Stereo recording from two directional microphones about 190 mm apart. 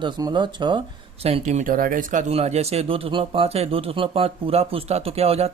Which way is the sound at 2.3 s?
35° right (ahead or behind).